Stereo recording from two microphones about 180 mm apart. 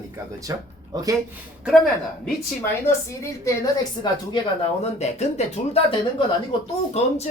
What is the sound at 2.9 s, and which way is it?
A woman's voice, 15° left (ahead or behind).